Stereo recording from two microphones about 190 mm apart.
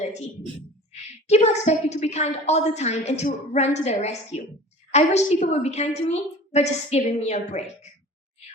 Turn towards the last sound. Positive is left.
turn(degrees=35)  # may be behind; listen again after turning